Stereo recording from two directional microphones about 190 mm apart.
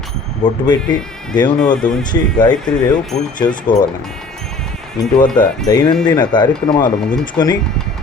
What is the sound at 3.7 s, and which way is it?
Speech, 25° left (ahead or behind).